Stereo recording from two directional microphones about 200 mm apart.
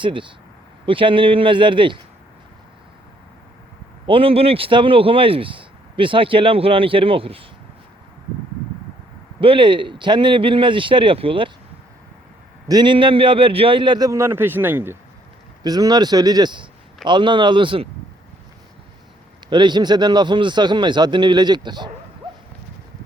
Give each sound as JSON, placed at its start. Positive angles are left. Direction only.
{"t": 0.0, "sound": "speech", "side_deg": -25}
{"t": 4.0, "sound": "speech", "side_deg": -25}
{"t": 9.4, "sound": "speech", "side_deg": -25}
{"t": 12.6, "sound": "speech", "side_deg": -20}
{"t": 19.5, "sound": "speech", "side_deg": -25}